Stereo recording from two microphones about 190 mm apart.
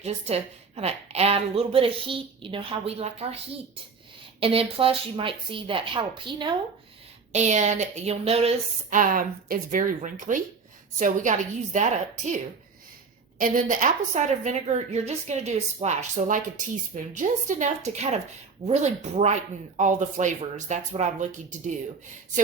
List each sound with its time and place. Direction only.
0.0 s a woman's voice: 35° right (ahead or behind)
7.3 s a woman's voice: 40° right (ahead or behind)
13.4 s a woman's voice: 45° right (ahead or behind)